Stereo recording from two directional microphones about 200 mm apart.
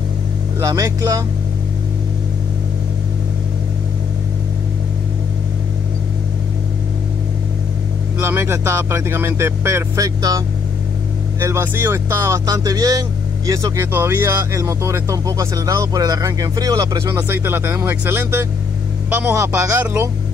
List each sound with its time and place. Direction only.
0.6 s speech: 15° right (ahead or behind)
8.2 s speech: 15° right (ahead or behind)